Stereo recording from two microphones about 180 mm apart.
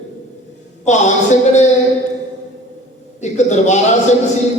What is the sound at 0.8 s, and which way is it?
Speech, 40° left (ahead or behind).